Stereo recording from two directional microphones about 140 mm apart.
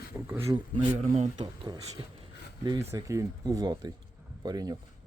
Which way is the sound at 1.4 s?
30° right (ahead or behind).